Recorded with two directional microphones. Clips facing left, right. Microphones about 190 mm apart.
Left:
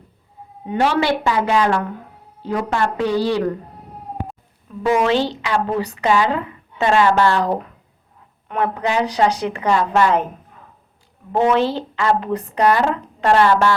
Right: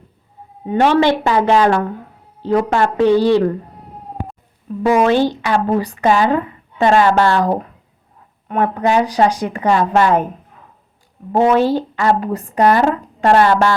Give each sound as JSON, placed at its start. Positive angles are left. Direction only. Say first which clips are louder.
{"t": 0.7, "sound": "a woman's voice", "louder": "right 5 dB", "side_deg": -40}
{"t": 4.8, "sound": "a woman's voice", "louder": "right 4 dB", "side_deg": -50}
{"t": 11.3, "sound": "a woman's voice", "louder": "right 4 dB", "side_deg": -40}